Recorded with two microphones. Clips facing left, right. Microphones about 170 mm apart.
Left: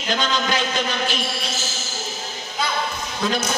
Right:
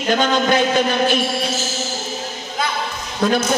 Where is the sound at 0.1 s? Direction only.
55° right (ahead or behind).